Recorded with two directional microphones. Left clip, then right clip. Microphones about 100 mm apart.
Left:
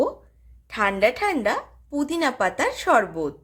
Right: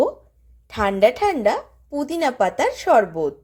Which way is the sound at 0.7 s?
35° right (ahead or behind).